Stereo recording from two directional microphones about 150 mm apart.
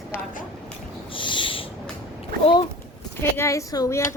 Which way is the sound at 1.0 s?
35° left (ahead or behind).